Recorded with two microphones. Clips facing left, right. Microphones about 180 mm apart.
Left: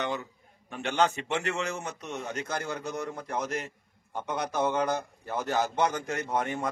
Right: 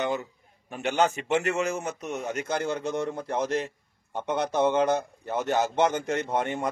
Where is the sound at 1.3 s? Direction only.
40° right (ahead or behind).